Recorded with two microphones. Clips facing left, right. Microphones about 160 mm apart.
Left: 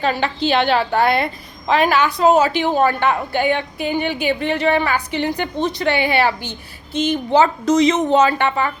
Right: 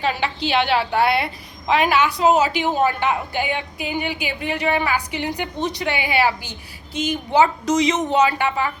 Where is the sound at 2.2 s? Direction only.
10° right (ahead or behind).